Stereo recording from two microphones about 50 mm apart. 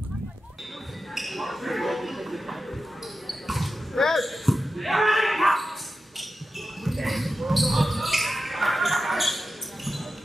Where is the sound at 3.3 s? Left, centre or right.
Centre.